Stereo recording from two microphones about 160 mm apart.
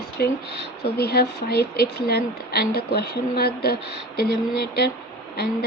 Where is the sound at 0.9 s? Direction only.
85° left.